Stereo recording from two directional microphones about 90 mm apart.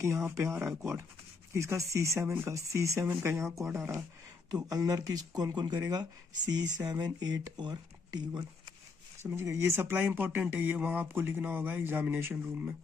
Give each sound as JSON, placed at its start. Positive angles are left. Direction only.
{"t": 0.0, "sound": "speech", "side_deg": -30}
{"t": 4.5, "sound": "speech", "side_deg": -45}
{"t": 9.2, "sound": "speech", "side_deg": -30}